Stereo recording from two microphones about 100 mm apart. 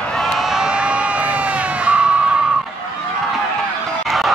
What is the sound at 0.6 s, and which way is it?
Crowd, 5° right (ahead or behind).